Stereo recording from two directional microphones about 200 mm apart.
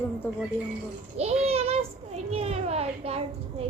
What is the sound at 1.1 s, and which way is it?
A child's voice, 30° right (ahead or behind).